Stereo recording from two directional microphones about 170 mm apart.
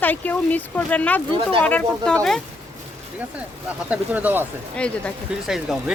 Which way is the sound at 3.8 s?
10° right (ahead or behind).